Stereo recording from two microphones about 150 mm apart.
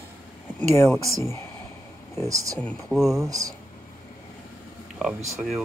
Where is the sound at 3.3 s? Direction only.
25° right (ahead or behind).